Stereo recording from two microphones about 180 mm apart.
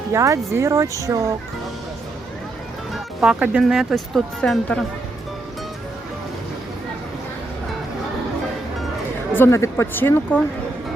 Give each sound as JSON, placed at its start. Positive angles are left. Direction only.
{"t": 0.1, "sound": "speech", "side_deg": -15}
{"t": 2.9, "sound": "speech", "side_deg": -5}
{"t": 9.3, "sound": "speech", "side_deg": 15}